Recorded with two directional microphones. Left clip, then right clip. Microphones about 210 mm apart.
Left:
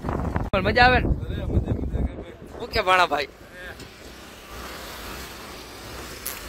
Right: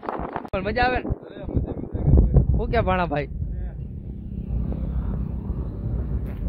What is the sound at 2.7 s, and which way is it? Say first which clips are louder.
Speech: left 4 dB; 10° left (ahead or behind).